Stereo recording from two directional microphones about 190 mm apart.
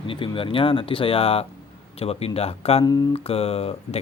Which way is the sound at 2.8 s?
20° left (ahead or behind).